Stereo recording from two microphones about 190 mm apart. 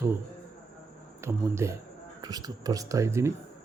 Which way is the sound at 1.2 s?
15° right (ahead or behind).